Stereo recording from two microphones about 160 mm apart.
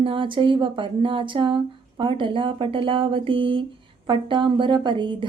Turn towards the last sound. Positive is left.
turn(degrees=-30)  # may be behind; listen again after turning